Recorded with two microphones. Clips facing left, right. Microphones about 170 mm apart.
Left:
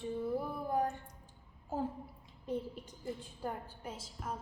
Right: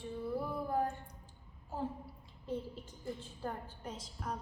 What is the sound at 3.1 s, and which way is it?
Speech, 10° left (ahead or behind).